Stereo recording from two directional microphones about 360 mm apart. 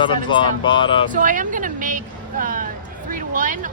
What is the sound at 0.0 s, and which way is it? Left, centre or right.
Speech, centre.